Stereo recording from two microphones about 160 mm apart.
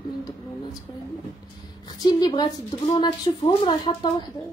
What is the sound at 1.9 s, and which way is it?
A woman's voice, 25° left (ahead or behind).